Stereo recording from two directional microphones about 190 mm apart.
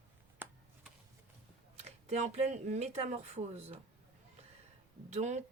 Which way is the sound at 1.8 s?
35° right (ahead or behind).